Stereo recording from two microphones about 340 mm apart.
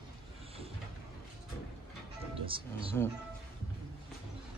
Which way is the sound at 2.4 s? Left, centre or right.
Centre.